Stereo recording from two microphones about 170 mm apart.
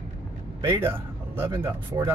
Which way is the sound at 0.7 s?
10° right (ahead or behind).